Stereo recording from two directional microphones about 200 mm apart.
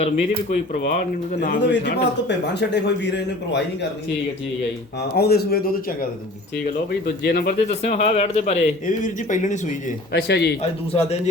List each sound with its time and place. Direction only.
0.0 s speech: 35° left (ahead or behind)
1.7 s speech: 60° left (ahead or behind)
5.1 s speech: 50° left (ahead or behind)
7.3 s speech: 50° left (ahead or behind)
7.7 s speech: 30° left (ahead or behind)
10.1 s speech: 55° left (ahead or behind)